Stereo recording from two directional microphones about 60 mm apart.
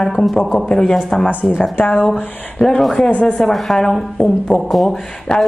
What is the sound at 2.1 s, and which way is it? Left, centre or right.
Speech, centre.